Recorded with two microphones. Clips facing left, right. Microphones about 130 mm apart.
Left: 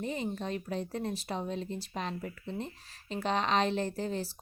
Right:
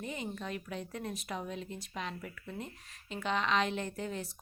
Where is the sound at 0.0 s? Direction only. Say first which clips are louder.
Left 5 dB; 35° left (ahead or behind).